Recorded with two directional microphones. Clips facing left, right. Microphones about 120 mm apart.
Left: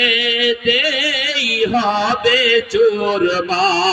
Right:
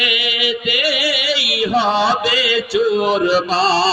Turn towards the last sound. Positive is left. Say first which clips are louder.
# even
turn(degrees=-25)  # may be behind; listen again after turning